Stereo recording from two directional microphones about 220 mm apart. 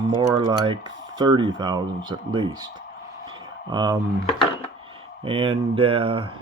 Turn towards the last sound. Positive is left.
turn(degrees=-25)  # may be behind; listen again after turning